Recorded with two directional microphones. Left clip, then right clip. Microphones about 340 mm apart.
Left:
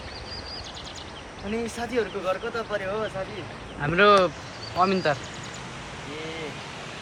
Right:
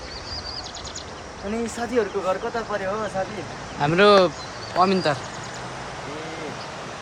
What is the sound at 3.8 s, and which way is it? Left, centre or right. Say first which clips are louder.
Speech: right 3 dB; centre.